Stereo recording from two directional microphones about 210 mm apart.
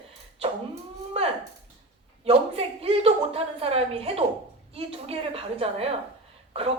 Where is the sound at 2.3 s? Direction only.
25° right (ahead or behind).